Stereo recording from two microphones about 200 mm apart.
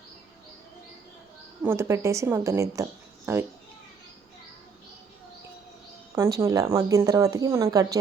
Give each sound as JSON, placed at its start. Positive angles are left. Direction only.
{"t": 1.6, "sound": "speech", "side_deg": -15}
{"t": 6.4, "sound": "speech", "side_deg": -15}